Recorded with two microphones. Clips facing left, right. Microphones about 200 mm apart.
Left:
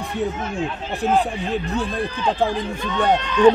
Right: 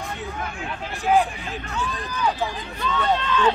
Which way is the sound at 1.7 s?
35° left (ahead or behind).